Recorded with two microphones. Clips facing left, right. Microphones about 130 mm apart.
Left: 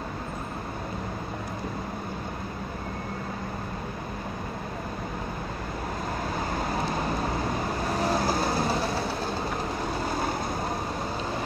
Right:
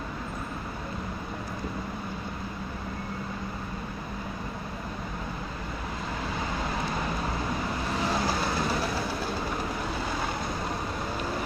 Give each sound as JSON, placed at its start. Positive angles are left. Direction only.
{"t": 8.0, "sound": "train", "side_deg": 45}